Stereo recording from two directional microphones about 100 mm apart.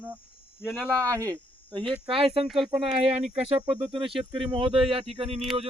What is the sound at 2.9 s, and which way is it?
Speech, 90° right.